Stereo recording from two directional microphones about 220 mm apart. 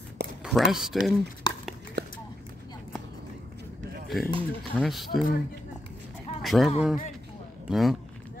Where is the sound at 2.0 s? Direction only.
45° right (ahead or behind).